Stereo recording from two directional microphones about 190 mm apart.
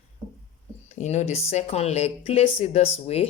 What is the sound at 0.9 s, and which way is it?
Speech, 35° left (ahead or behind).